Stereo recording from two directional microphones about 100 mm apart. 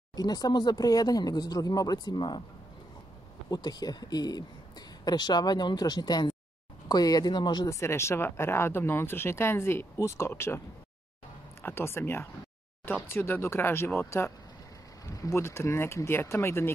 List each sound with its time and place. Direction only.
0.1 s speech: 40° left (ahead or behind)
3.4 s speech: 45° left (ahead or behind)
7.6 s speech: 30° left (ahead or behind)
11.6 s speech: 25° left (ahead or behind)